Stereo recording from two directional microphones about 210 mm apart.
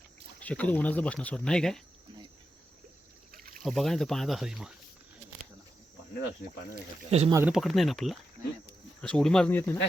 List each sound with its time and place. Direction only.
0.3 s speech: 5° left (ahead or behind)
3.3 s a sound: 45° right (ahead or behind)
3.6 s speech: centre (ahead or behind)
7.1 s speech: 30° right (ahead or behind)
7.3 s speech: 5° right (ahead or behind)